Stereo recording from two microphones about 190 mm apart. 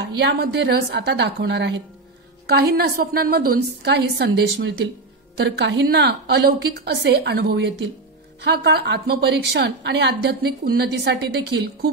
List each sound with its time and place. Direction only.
0.0 s a woman's voice: 60° right (ahead or behind)